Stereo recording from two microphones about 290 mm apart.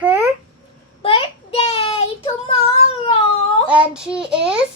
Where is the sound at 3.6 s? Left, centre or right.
Centre.